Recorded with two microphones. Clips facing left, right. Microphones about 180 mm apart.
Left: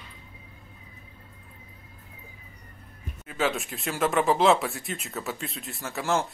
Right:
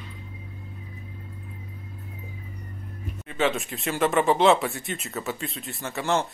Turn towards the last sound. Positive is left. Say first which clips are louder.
# right 1 dB
turn(degrees=0)  # may be behind; listen again after turning